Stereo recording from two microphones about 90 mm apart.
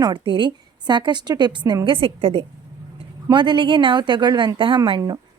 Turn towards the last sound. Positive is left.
turn(degrees=-65)  # may be behind; listen again after turning